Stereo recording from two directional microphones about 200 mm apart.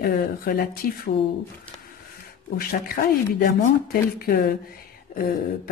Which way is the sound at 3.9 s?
50° left (ahead or behind).